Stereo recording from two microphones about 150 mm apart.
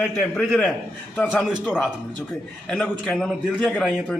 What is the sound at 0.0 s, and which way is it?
A man's voice, 5° left (ahead or behind).